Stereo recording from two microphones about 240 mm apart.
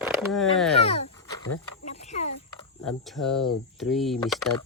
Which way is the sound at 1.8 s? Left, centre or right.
Left.